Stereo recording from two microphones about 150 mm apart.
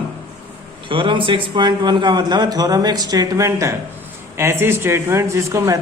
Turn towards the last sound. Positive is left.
turn(degrees=-20)  # may be behind; listen again after turning